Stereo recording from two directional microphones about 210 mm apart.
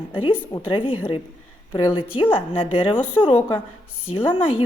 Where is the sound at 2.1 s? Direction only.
25° left (ahead or behind).